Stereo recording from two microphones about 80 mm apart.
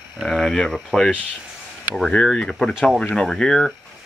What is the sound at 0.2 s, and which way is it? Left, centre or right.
Speech, centre.